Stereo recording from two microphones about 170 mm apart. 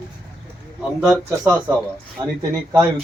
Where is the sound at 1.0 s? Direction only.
5° right (ahead or behind).